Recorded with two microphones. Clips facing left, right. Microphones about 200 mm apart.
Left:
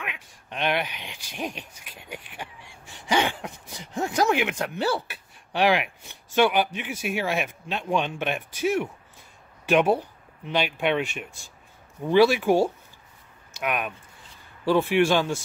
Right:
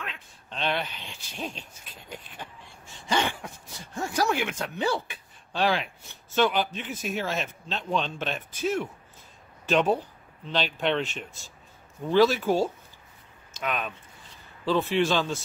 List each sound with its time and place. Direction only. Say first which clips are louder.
0.0 s a man's voice: left 2 dB; 15° left (ahead or behind)